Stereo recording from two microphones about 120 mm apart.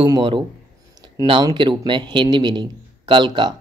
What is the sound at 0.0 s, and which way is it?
Speech, 40° right (ahead or behind).